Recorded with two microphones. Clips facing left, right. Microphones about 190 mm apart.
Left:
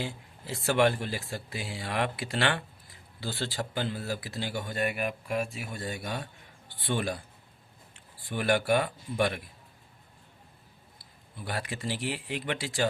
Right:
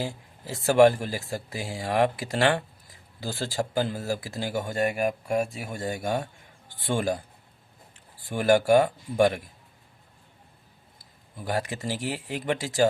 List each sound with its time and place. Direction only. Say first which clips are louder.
0.0 s speech: right 4 dB; 40° right (ahead or behind)
11.3 s speech: right 6 dB; 40° right (ahead or behind)